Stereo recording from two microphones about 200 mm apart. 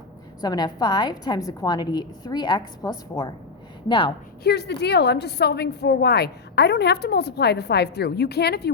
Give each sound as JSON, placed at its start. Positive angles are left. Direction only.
{"t": 0.4, "sound": "a woman's voice", "side_deg": 20}
{"t": 4.4, "sound": "a woman's voice", "side_deg": 55}